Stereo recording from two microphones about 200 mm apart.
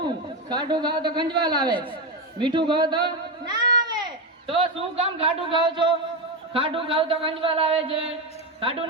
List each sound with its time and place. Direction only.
0.0 s a man's voice: 20° right (ahead or behind)